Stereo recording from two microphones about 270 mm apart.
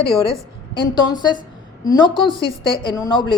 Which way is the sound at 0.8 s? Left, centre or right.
Centre.